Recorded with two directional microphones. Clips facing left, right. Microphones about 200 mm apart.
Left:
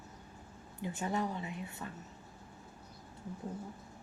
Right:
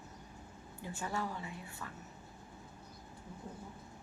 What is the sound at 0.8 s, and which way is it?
A woman's voice, 20° left (ahead or behind).